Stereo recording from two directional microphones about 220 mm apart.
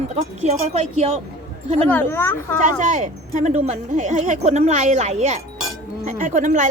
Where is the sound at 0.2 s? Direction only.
30° right (ahead or behind).